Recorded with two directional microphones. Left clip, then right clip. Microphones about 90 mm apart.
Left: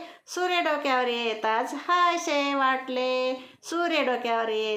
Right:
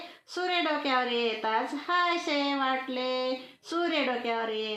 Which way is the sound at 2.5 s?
15° left (ahead or behind).